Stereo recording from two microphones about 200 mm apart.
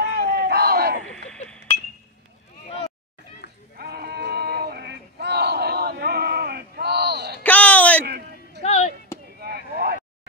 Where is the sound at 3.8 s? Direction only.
50° right (ahead or behind).